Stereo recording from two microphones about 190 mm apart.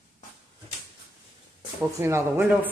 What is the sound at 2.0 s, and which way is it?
Speech, 15° right (ahead or behind).